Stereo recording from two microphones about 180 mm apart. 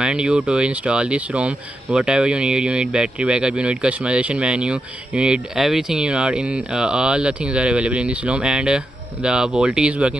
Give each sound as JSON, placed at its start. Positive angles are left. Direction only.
{"t": 0.0, "sound": "speech", "side_deg": -5}